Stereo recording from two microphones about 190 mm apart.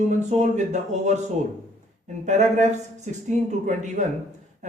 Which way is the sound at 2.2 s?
40° right (ahead or behind).